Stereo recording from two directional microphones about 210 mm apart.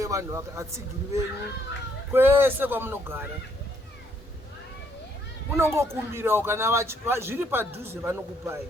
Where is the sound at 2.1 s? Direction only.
10° right (ahead or behind).